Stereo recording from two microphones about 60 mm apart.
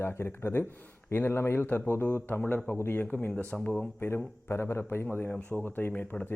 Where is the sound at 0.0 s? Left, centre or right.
Left.